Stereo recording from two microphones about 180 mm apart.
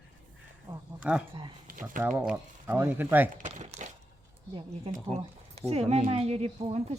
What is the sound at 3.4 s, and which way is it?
Crumpling, 40° right (ahead or behind).